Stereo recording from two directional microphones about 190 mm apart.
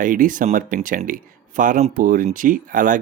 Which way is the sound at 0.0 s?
45° right (ahead or behind).